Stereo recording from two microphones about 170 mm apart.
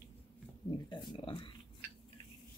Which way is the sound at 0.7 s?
25° left (ahead or behind).